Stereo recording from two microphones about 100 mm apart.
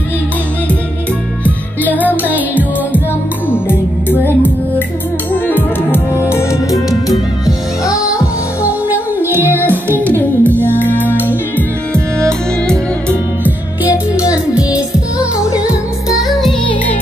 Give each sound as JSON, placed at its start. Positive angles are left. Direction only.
{"t": 1.4, "sound": "music", "side_deg": 15}
{"t": 2.0, "sound": "music", "side_deg": -15}
{"t": 3.4, "sound": "music", "side_deg": 20}
{"t": 8.6, "sound": "music", "side_deg": -15}
{"t": 10.0, "sound": "music", "side_deg": 15}
{"t": 11.9, "sound": "music", "side_deg": 10}
{"t": 15.5, "sound": "music", "side_deg": -10}
{"t": 16.3, "sound": "music", "side_deg": 0}